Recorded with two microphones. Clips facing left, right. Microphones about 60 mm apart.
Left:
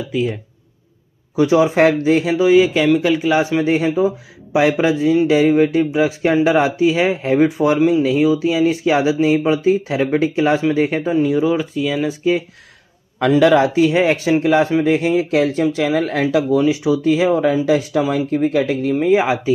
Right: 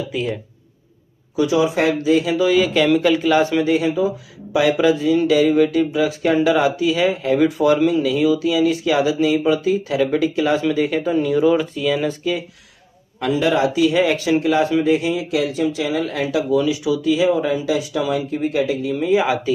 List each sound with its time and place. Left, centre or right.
0.1 s speech: centre
1.3 s speech: left
2.3 s speech: centre
3.6 s speech: left
11.1 s speech: centre
13.2 s a man's voice: left
13.7 s speech: left